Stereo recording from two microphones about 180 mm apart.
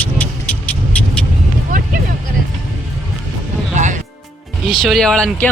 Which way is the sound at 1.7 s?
50° right (ahead or behind).